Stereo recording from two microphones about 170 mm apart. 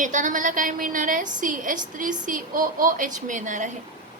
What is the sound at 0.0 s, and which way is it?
A woman's voice, 50° right (ahead or behind).